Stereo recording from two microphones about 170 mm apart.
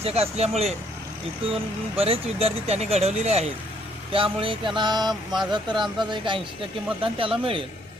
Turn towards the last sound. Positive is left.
turn(degrees=-30)  # may be behind; listen again after turning